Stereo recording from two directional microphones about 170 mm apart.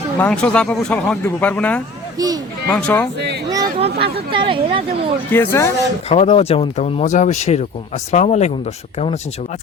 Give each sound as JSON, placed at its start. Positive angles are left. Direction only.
{"t": 0.2, "sound": "speech", "side_deg": 5}
{"t": 2.1, "sound": "speech", "side_deg": -20}
{"t": 2.7, "sound": "speech", "side_deg": 10}
{"t": 3.2, "sound": "speech", "side_deg": -80}
{"t": 3.8, "sound": "speech", "side_deg": -70}
{"t": 4.3, "sound": "speech", "side_deg": -30}
{"t": 5.3, "sound": "speech", "side_deg": 15}
{"t": 6.1, "sound": "speech", "side_deg": 35}